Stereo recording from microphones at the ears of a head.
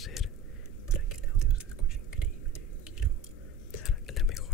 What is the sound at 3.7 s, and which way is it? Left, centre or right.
Whispering, left.